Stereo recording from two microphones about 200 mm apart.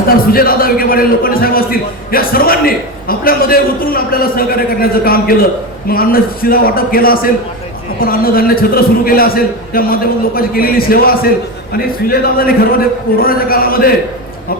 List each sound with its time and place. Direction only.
0.3 s a man's voice: 45° left (ahead or behind)